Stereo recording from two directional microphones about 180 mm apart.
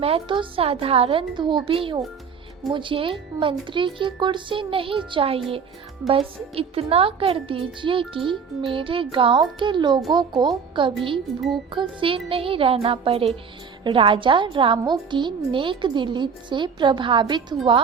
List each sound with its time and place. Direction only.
0.0 s a woman's voice: 30° right (ahead or behind)